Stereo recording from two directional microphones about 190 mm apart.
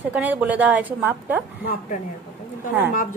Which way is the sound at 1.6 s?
40° left (ahead or behind).